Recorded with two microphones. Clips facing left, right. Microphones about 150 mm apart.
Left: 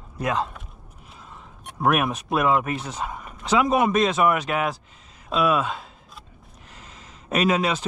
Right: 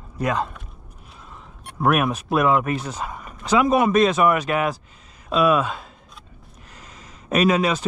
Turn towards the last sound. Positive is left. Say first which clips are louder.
# right 3 dB
turn(degrees=10)  # may be behind; listen again after turning